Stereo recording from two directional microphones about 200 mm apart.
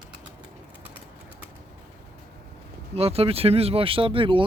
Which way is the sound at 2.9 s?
30° right (ahead or behind).